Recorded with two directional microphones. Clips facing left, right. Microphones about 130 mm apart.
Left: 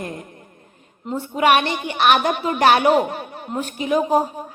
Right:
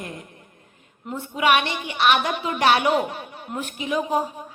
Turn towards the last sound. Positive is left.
turn(degrees=45)  # may be behind; listen again after turning